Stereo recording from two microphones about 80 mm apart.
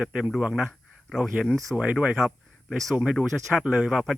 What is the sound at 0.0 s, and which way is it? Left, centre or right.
Speech, centre.